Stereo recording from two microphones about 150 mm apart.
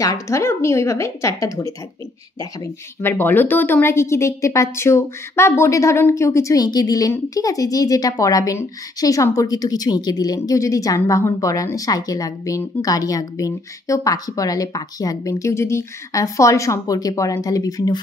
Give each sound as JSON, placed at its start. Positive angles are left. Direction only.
{"t": 0.0, "sound": "speech", "side_deg": 20}